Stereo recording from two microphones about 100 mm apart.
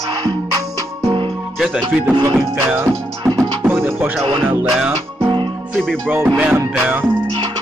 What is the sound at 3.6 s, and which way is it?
Speech, 25° right (ahead or behind).